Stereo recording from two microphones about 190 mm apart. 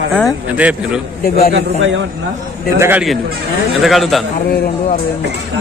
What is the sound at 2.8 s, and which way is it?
A man's voice, 5° right (ahead or behind).